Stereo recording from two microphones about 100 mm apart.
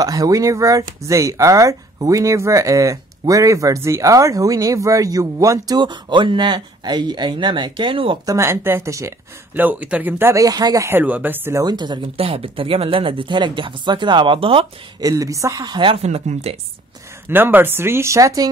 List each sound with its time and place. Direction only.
0.0 s speech: 35° right (ahead or behind)
5.8 s speech: 50° right (ahead or behind)
8.3 s speech: 25° right (ahead or behind)
9.6 s speech: 15° right (ahead or behind); by 10.9 s 40° right (ahead or behind)
10.9 s speech: 20° right (ahead or behind)
11.6 s speech: 45° right (ahead or behind)
12.2 s speech: 70° right (ahead or behind)
15.0 s speech: 35° right (ahead or behind); by 16.0 s 50° right (ahead or behind)
16.0 s speech: 90° right
17.3 s speech: 20° right (ahead or behind)